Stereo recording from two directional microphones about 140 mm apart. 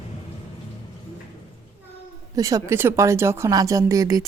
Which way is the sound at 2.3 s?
25° right (ahead or behind).